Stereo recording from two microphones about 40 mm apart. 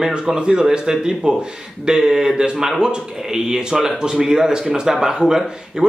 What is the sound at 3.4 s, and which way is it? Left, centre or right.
Speech, centre.